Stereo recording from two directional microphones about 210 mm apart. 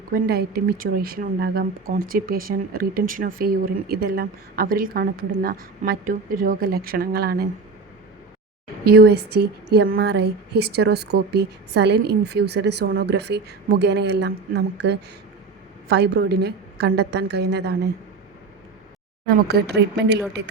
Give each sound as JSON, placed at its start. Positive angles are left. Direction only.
{"t": 0.1, "sound": "a woman's voice", "side_deg": -45}
{"t": 8.8, "sound": "a woman's voice", "side_deg": -45}
{"t": 19.5, "sound": "a woman's voice", "side_deg": -50}